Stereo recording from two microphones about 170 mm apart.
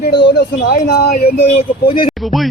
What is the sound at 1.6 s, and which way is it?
Speech, 30° left (ahead or behind).